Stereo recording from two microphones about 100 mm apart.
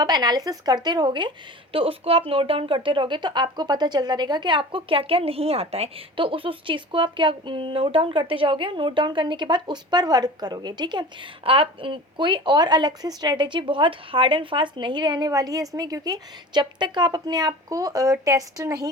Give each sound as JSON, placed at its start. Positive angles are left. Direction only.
{"t": 0.0, "sound": "speech", "side_deg": -45}
{"t": 1.7, "sound": "speech", "side_deg": -65}
{"t": 11.4, "sound": "speech", "side_deg": -65}
{"t": 15.3, "sound": "a woman's voice", "side_deg": -35}